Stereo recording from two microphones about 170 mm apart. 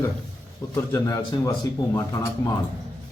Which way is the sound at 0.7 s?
15° left (ahead or behind).